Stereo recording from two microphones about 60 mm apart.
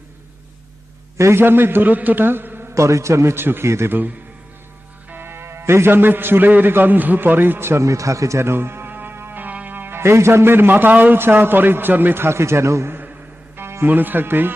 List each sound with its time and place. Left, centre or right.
1.2 s a man's voice: right
2.7 s a man's voice: right
5.0 s a man's voice: right